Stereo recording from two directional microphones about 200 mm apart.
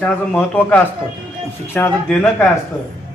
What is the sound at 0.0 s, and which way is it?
A man's voice, 10° left (ahead or behind).